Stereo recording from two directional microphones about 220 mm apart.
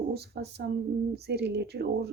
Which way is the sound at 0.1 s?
45° right (ahead or behind).